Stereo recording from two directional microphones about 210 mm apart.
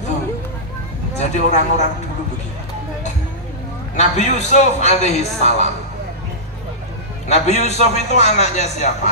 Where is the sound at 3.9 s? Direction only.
35° left (ahead or behind).